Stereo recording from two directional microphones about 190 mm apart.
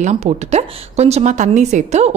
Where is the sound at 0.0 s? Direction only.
35° right (ahead or behind).